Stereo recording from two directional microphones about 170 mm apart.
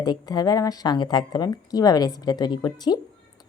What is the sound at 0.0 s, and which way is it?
Speech, 25° left (ahead or behind).